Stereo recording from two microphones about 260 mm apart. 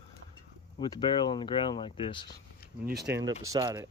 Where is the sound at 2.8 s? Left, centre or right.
Right.